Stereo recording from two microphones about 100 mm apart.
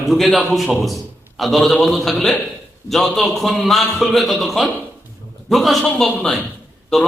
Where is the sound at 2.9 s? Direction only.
Centre (ahead or behind).